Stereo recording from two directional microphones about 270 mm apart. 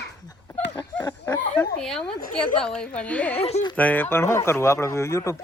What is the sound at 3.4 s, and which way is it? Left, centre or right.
Speech, left.